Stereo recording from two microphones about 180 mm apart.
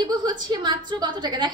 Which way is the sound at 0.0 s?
25° right (ahead or behind).